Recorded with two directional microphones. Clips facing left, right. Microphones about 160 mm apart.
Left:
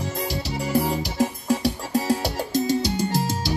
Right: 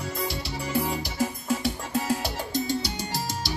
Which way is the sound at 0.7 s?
40° left (ahead or behind).